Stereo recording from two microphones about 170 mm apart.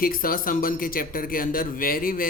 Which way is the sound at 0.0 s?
55° left (ahead or behind).